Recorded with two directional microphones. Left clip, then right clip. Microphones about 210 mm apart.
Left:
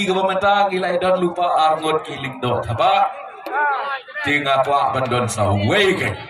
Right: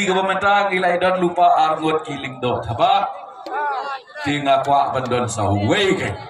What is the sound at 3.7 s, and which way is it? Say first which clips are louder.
A man's voice: left 3 dB; 55° right (ahead or behind).